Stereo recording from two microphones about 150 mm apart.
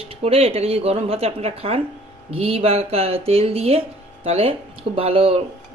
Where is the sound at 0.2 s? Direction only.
40° right (ahead or behind).